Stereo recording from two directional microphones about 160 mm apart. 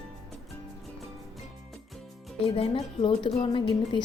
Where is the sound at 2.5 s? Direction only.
35° left (ahead or behind).